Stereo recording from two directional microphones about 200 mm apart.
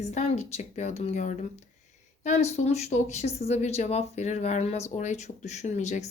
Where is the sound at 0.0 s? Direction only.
35° left (ahead or behind).